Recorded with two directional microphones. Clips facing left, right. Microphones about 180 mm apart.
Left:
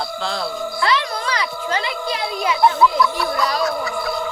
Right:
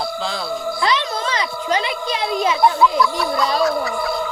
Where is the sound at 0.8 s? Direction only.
20° right (ahead or behind).